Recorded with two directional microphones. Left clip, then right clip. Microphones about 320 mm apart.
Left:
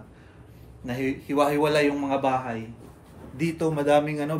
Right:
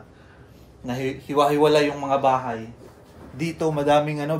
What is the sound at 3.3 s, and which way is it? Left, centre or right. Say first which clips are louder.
Speech: right 2 dB; centre.